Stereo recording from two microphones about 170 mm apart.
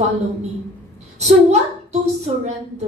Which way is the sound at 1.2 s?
40° right (ahead or behind).